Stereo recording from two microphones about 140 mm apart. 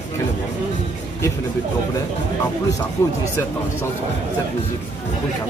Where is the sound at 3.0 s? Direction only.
20° left (ahead or behind).